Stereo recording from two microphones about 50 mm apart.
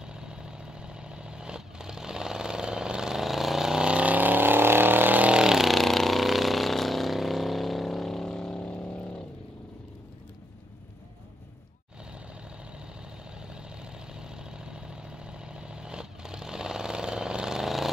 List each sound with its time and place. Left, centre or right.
0.0 s vehicle: centre; by 5.3 s right
5.3 s vehicle: centre
5.7 s vehicle: centre
8.5 s vehicle: left
13.5 s vehicle: centre